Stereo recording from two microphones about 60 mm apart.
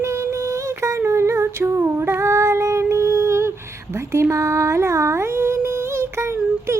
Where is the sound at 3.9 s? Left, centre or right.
Right.